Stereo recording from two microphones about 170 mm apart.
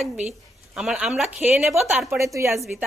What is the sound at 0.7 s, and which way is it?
A woman's voice, 5° right (ahead or behind).